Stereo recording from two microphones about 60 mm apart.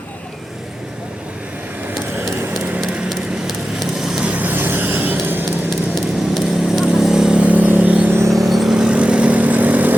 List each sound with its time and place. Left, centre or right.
3.1 s vehicle: centre
4.3 s vehicle: right
5.9 s vehicle: centre; by 8.1 s right
8.3 s vehicle: centre; by 9.9 s right